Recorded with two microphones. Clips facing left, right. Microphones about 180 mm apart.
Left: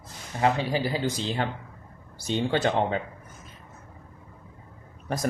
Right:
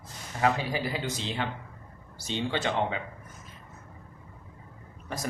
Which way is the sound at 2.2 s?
45° left (ahead or behind).